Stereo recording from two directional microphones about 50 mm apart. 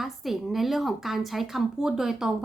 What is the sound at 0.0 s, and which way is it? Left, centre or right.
A woman's voice, centre.